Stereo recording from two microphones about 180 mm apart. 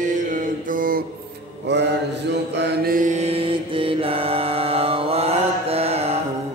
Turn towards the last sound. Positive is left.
turn(degrees=-35)  # may be behind; listen again after turning